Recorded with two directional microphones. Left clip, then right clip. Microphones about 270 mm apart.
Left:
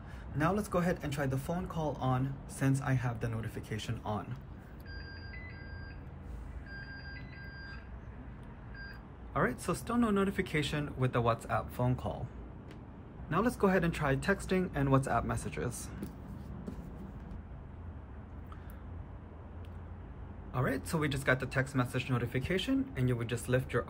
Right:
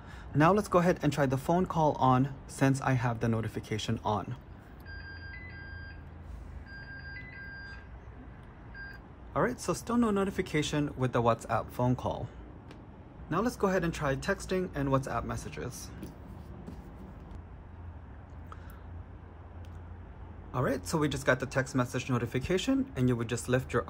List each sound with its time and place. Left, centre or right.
0.4 s speech: centre
8.8 s speech: centre
13.3 s speech: centre
20.5 s speech: centre